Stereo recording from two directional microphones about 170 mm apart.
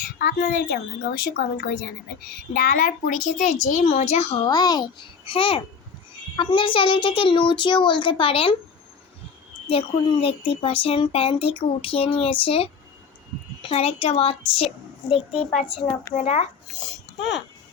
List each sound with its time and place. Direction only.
0.0 s a woman's voice: 65° left (ahead or behind); by 4.4 s 35° left (ahead or behind)
4.4 s a child's voice: 25° left (ahead or behind)
9.6 s speech: 35° left (ahead or behind)
17.2 s speech: 90° left